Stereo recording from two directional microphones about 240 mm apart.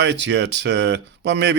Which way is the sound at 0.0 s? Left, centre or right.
Right.